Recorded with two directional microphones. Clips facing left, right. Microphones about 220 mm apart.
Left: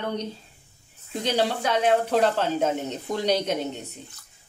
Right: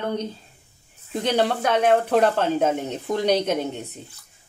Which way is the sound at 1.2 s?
55° right (ahead or behind).